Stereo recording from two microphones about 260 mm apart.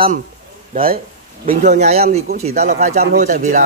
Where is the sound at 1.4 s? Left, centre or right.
Right.